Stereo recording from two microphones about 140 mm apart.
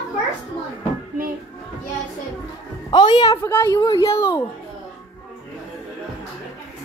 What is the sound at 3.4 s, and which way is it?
Speech, 15° left (ahead or behind).